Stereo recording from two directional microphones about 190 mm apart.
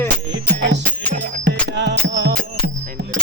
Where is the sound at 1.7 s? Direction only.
65° right (ahead or behind).